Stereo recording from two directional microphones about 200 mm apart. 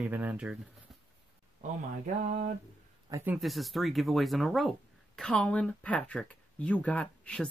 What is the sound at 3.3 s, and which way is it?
Speech, centre (ahead or behind).